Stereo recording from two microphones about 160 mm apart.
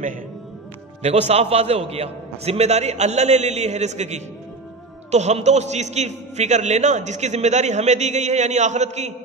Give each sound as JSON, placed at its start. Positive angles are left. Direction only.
{"t": 1.0, "sound": "a man's voice", "side_deg": -40}